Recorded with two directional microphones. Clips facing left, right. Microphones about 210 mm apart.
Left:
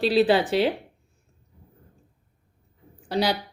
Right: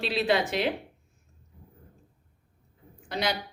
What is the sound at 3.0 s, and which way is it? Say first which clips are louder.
Speech: left 6 dB; 35° left (ahead or behind).